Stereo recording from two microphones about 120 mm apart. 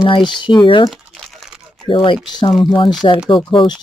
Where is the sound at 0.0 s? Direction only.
40° left (ahead or behind).